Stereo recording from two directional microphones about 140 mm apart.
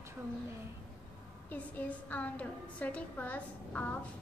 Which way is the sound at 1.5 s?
10° left (ahead or behind).